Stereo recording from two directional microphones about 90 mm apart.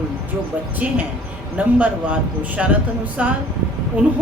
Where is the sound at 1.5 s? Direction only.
15° right (ahead or behind).